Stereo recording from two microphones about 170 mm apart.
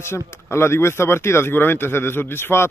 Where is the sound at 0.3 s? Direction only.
15° left (ahead or behind).